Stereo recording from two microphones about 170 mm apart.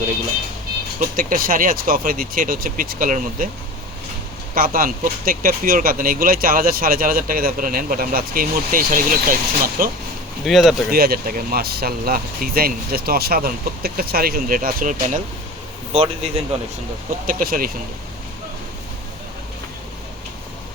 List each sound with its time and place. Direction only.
0.9 s speech: 55° right (ahead or behind)
4.5 s speech: 55° right (ahead or behind)
10.4 s speech: centre (ahead or behind)
10.9 s speech: 60° right (ahead or behind)
15.9 s a man's voice: 35° right (ahead or behind)
17.2 s speech: 60° right (ahead or behind)